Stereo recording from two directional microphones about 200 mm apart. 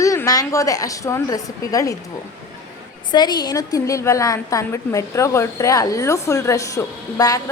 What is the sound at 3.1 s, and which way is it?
A woman's voice, 20° left (ahead or behind).